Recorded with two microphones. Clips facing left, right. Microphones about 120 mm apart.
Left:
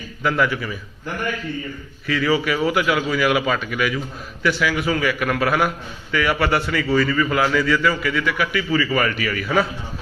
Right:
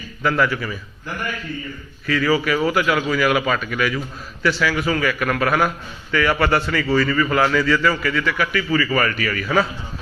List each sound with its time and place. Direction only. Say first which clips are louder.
0.2 s a man's voice: right 1 dB; 15° left (ahead or behind)
2.0 s a man's voice: right 1 dB; 20° left (ahead or behind)